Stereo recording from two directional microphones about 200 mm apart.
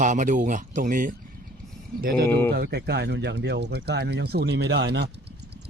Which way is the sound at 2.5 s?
55° right (ahead or behind).